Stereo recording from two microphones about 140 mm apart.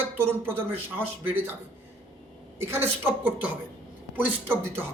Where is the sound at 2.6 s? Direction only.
15° right (ahead or behind).